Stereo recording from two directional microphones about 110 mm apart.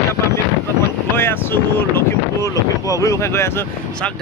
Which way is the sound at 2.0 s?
30° left (ahead or behind).